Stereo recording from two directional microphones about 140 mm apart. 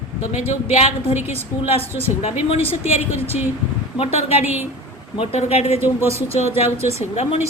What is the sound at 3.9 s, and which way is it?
A woman's voice, 45° left (ahead or behind).